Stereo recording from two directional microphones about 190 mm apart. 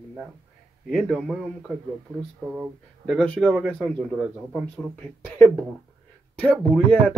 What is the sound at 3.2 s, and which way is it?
Speech, 5° left (ahead or behind).